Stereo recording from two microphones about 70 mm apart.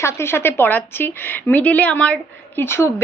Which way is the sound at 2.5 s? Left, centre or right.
Left.